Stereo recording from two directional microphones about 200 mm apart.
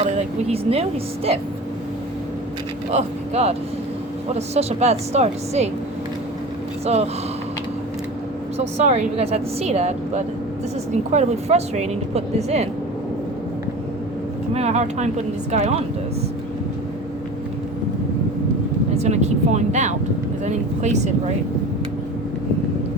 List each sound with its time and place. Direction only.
0.0 s a woman's voice: 35° right (ahead or behind)
2.9 s a woman's voice: 30° right (ahead or behind)
6.8 s a woman's voice: 30° right (ahead or behind)
8.5 s a woman's voice: 35° right (ahead or behind)
14.5 s a woman's voice: 35° right (ahead or behind)
18.9 s a woman's voice: 35° right (ahead or behind)